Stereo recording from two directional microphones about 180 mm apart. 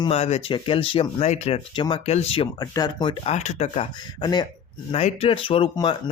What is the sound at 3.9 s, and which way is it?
Speech, 25° left (ahead or behind).